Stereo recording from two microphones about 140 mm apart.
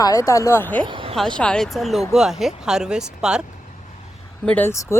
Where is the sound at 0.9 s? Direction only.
40° right (ahead or behind).